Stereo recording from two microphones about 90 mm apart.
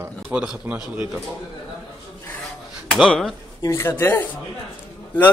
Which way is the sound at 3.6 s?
30° left (ahead or behind).